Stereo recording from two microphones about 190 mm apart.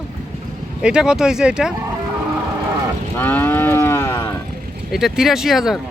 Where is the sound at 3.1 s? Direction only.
10° left (ahead or behind).